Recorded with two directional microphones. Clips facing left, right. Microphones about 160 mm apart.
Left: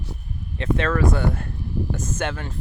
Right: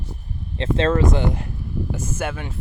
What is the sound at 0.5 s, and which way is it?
Speech, 30° right (ahead or behind).